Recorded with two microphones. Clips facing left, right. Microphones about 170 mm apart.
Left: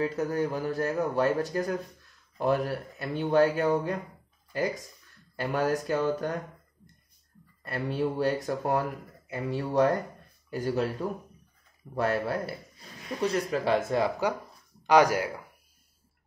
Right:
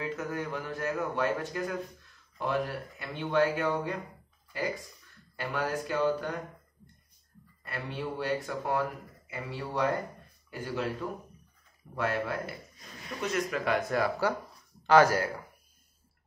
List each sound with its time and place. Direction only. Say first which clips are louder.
0.0 s speech: left 6 dB; 35° left (ahead or behind)
3.0 s speech: left 4 dB; 40° left (ahead or behind)
5.3 s speech: left 5 dB; 40° left (ahead or behind)
7.6 s speech: left 7 dB; 40° left (ahead or behind); by 15.4 s 15° left (ahead or behind)